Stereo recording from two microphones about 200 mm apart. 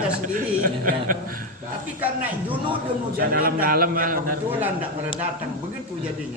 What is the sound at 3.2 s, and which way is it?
A man's voice, 50° right (ahead or behind).